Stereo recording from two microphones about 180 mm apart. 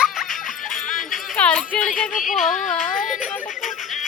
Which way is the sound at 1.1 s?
Centre (ahead or behind).